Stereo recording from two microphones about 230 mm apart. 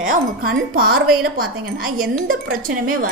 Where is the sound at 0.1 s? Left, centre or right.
Right.